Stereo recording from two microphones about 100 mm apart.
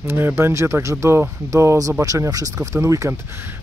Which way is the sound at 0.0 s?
20° right (ahead or behind).